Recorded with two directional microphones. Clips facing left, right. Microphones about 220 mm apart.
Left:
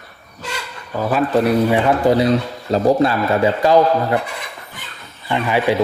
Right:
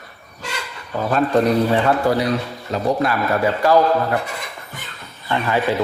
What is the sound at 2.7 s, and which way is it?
A man's voice, 30° left (ahead or behind).